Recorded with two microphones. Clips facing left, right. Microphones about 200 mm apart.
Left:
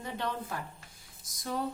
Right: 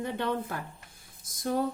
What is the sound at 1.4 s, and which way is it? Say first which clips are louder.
Speech: right 6 dB; 50° right (ahead or behind).